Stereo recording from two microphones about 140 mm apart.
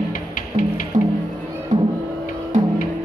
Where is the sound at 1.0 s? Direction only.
35° right (ahead or behind).